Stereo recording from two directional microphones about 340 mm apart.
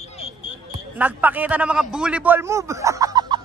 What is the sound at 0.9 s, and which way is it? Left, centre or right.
A man's voice, centre.